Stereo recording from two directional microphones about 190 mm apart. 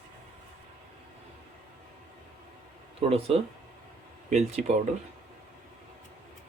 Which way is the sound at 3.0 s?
30° right (ahead or behind).